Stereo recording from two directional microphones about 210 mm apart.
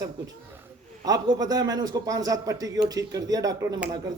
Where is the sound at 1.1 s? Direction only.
15° right (ahead or behind).